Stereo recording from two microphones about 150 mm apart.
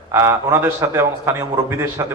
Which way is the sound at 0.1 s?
15° right (ahead or behind).